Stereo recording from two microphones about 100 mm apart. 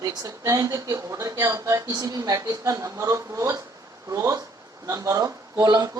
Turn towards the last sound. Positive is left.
turn(degrees=-40)  # may be behind; listen again after turning